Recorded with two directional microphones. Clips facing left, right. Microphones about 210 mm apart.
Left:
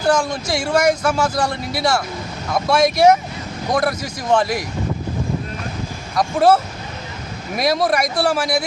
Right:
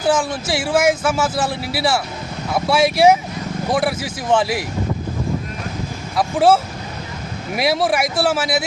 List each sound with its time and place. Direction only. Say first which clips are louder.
0.0 s a man's voice: even; 5° right (ahead or behind)
6.1 s a man's voice: even; 5° right (ahead or behind)